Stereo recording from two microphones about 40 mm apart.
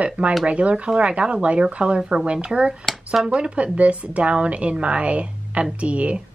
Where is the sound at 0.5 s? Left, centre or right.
Right.